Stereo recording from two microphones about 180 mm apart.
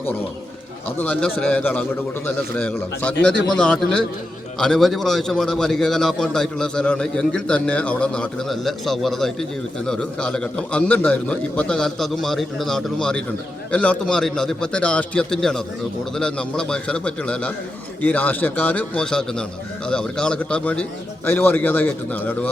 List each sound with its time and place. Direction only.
0.9 s a man's voice: 5° left (ahead or behind)